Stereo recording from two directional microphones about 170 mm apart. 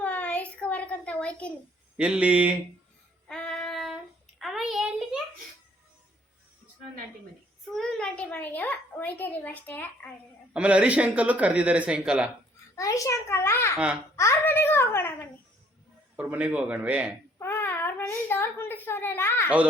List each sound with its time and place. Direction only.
0.0 s a sound: 10° left (ahead or behind)
2.0 s speech: 5° right (ahead or behind)
3.2 s female singing: 5° left (ahead or behind)
4.4 s a sound: centre (ahead or behind)
7.7 s a woman's voice: centre (ahead or behind)
10.5 s speech: 5° right (ahead or behind)
12.7 s a woman's voice: 20° left (ahead or behind)
16.1 s speech: 10° right (ahead or behind)
17.4 s a child's voice: 10° left (ahead or behind)